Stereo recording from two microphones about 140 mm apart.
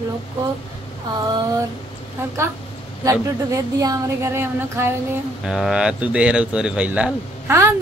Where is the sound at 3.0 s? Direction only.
25° right (ahead or behind).